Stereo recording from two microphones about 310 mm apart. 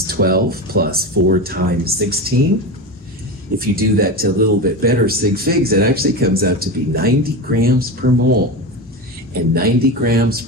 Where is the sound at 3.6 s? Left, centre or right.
Right.